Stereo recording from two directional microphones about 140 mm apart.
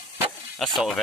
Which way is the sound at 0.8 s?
Centre (ahead or behind).